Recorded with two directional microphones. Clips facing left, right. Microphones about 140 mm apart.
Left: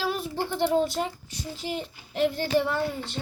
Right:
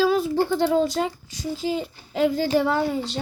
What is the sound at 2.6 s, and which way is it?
Speech, 90° right.